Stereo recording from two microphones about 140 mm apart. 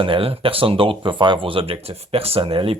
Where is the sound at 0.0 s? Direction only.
40° right (ahead or behind).